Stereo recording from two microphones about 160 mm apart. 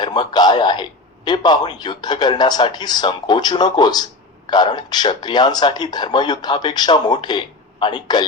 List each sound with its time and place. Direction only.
0.0 s a man's voice: 25° left (ahead or behind)